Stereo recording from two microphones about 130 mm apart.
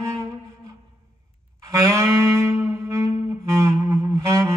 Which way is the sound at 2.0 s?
20° right (ahead or behind).